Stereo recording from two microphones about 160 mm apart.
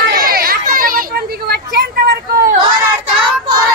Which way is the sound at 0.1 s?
65° right (ahead or behind).